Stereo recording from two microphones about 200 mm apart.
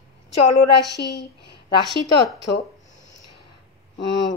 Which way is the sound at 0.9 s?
55° left (ahead or behind).